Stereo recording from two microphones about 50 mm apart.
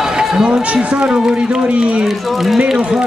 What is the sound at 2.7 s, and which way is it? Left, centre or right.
Speech, centre.